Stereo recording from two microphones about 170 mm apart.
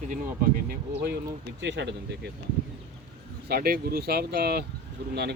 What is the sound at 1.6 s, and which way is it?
Speech, 90° right.